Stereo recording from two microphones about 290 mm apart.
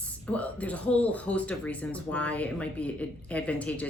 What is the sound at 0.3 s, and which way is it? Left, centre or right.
Speech, centre.